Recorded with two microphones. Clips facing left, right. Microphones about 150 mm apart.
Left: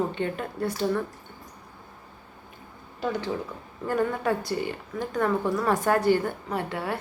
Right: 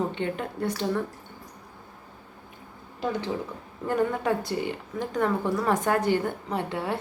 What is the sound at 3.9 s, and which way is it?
A woman's voice, 20° right (ahead or behind).